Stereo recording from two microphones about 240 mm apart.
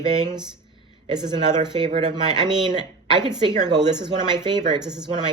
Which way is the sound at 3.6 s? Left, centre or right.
Centre.